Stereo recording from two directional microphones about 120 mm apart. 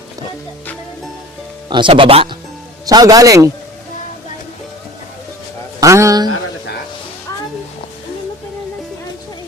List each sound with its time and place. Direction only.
1.7 s speech: 45° right (ahead or behind)
2.8 s a man's voice: 30° right (ahead or behind)
5.8 s a sound: 25° right (ahead or behind)